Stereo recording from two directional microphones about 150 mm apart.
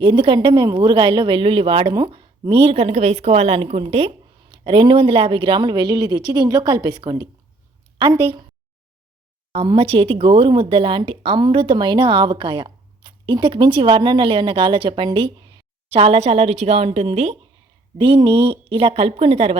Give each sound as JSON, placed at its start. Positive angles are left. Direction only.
{"t": 0.0, "sound": "speech", "side_deg": -35}
{"t": 9.5, "sound": "a woman's voice", "side_deg": -40}
{"t": 17.9, "sound": "speech", "side_deg": -35}